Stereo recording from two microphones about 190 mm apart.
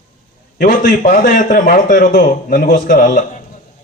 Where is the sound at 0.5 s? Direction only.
50° left (ahead or behind).